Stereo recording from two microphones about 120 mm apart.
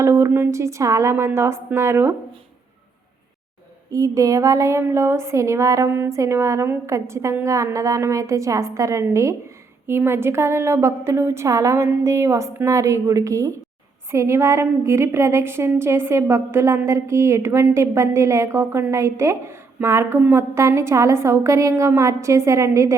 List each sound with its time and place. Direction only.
0.0 s a woman's voice: 25° right (ahead or behind)
3.9 s a woman's voice: 30° right (ahead or behind)